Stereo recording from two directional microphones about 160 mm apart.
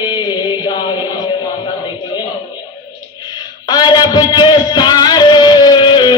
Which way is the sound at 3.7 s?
25° left (ahead or behind).